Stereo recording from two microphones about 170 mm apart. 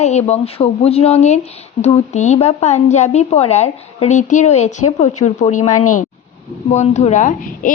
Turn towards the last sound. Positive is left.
turn(degrees=45)  # may be behind; listen again after turning